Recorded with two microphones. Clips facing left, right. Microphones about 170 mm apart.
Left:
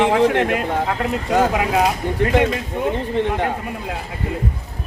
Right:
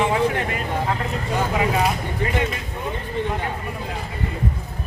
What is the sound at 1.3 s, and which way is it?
Speech, 70° left (ahead or behind).